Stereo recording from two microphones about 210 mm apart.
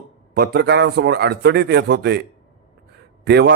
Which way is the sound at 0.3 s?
50° right (ahead or behind).